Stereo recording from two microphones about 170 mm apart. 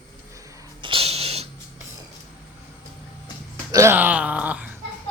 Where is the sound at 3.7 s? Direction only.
15° right (ahead or behind).